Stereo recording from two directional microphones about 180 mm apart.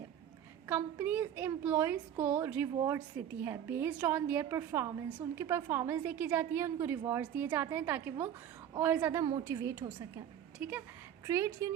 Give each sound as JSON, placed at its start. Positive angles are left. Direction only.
{"t": 0.7, "sound": "a woman's voice", "side_deg": -10}